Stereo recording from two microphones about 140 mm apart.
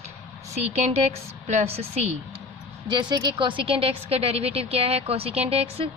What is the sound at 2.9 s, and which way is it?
Speech, 30° right (ahead or behind).